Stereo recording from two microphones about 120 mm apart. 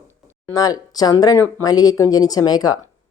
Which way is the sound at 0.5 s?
30° left (ahead or behind).